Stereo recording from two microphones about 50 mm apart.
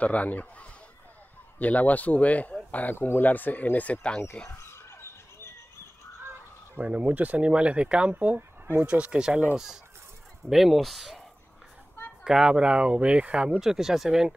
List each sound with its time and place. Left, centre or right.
0.0 s a man's voice: left
4.6 s basketball bounce: left
6.8 s speech: right
8.1 s speech: right
8.4 s a sound: right
8.8 s speech: right
10.5 s speech: centre
12.3 s speech: centre
13.6 s speech: centre